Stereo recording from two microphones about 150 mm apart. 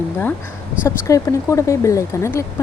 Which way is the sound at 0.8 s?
20° left (ahead or behind).